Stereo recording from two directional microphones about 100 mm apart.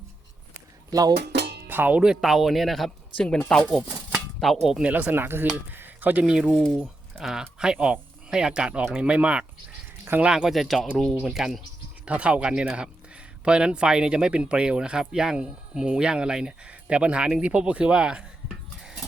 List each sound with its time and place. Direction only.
0.9 s speech: 35° right (ahead or behind)
1.6 s speech: 20° right (ahead or behind); by 4.9 s 5° right (ahead or behind)
4.9 s speech: 15° right (ahead or behind)
6.2 s speech: 10° right (ahead or behind)
6.5 s speech: 5° left (ahead or behind)
6.7 s speech: 5° right (ahead or behind)